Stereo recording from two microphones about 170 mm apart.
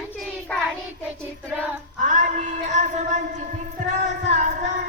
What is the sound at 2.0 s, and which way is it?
Music, 45° right (ahead or behind).